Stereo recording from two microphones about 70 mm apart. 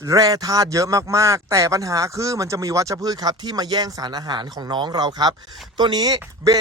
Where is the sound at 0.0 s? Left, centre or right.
Right.